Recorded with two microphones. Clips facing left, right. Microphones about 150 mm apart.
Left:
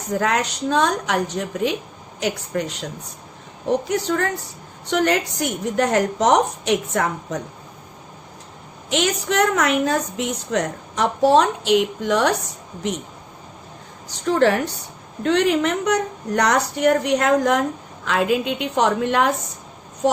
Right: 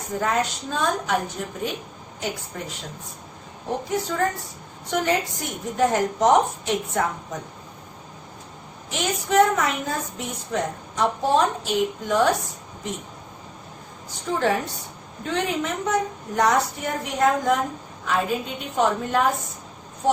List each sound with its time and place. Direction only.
0.2 s a woman's voice: 90° left
3.8 s a woman's voice: 80° left
8.9 s a woman's voice: 90° left
14.1 s a woman's voice: 80° left